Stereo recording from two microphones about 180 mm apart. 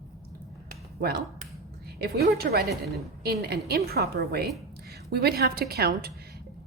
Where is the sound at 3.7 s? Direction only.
60° right (ahead or behind).